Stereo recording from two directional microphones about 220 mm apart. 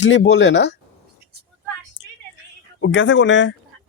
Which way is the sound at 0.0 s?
55° left (ahead or behind).